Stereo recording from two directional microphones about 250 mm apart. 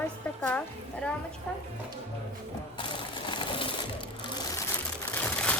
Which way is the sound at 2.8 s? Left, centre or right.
Centre.